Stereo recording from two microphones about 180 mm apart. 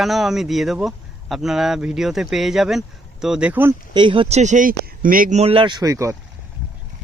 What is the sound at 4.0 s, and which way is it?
Speech, 30° right (ahead or behind).